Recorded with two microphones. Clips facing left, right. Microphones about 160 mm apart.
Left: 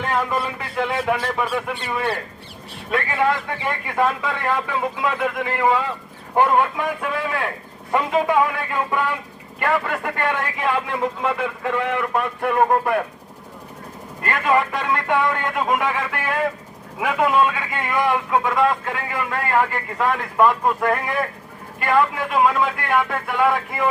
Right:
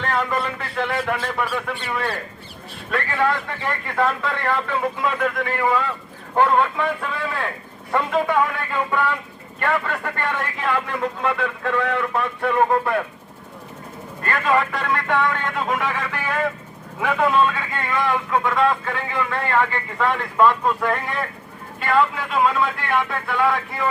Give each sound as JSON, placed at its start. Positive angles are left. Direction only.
{"t": 0.0, "sound": "a man's voice", "side_deg": 10}
{"t": 14.3, "sound": "a man's voice", "side_deg": 15}